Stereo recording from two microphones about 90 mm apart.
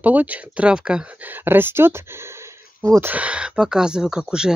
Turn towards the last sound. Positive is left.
turn(degrees=-10)  # may be behind; listen again after turning